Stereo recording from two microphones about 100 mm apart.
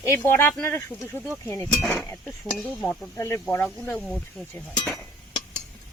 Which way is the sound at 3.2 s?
30° left (ahead or behind).